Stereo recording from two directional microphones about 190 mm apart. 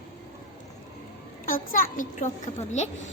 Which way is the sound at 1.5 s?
45° left (ahead or behind).